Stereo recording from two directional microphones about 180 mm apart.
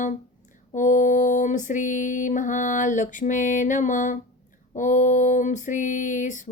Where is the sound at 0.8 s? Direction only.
45° left (ahead or behind).